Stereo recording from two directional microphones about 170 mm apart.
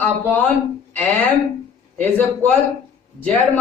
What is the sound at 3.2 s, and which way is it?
Speech, 10° left (ahead or behind).